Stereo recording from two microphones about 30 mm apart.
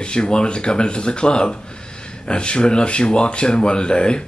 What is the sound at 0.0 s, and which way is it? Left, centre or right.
Speech, left.